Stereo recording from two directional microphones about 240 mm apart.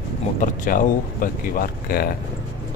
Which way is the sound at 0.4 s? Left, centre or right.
Left.